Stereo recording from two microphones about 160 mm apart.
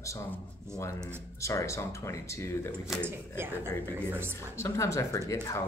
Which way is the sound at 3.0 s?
15° right (ahead or behind).